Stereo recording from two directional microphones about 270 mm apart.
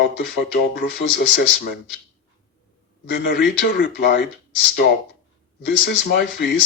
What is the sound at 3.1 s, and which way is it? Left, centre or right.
Speech, left.